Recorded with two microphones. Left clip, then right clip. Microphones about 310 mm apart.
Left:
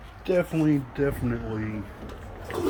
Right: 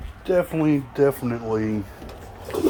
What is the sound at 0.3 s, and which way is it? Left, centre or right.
Speech, centre.